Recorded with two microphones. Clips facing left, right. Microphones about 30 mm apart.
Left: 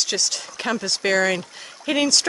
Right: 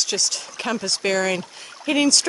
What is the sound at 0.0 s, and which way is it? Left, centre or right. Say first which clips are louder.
Speech: even; centre.